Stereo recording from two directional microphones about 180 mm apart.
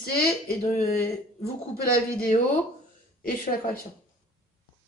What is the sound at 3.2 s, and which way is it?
Speech, 50° left (ahead or behind).